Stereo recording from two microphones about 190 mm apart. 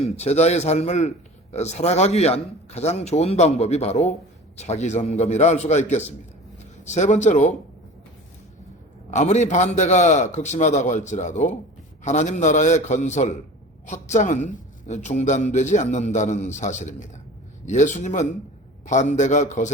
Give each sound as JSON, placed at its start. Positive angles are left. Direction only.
{"t": 0.0, "sound": "a woman's voice", "side_deg": 35}
{"t": 9.0, "sound": "a woman's voice", "side_deg": 40}